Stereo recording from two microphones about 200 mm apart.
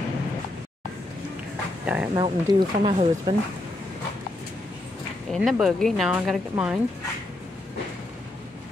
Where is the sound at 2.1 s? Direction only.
25° right (ahead or behind).